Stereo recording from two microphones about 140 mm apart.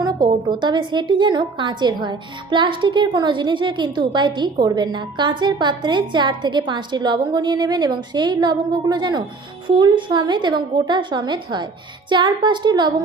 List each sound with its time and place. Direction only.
0.0 s a woman's voice: 30° right (ahead or behind)